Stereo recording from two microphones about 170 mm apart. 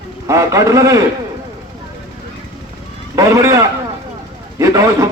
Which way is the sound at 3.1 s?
20° right (ahead or behind).